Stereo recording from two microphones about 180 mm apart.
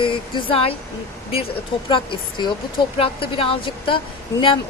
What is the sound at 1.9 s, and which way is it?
Speech, 25° left (ahead or behind).